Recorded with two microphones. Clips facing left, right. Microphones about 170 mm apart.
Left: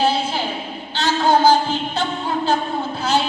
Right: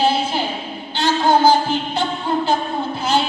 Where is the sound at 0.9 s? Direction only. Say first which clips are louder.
Right 1 dB; 10° right (ahead or behind).